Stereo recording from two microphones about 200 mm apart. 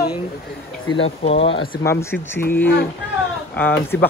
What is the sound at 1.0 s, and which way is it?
A man's voice, 30° left (ahead or behind).